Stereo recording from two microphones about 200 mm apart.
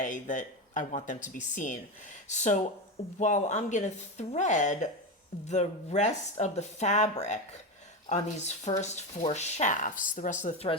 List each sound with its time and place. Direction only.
0.0 s speech: 40° left (ahead or behind)
10.4 s speech: 30° left (ahead or behind)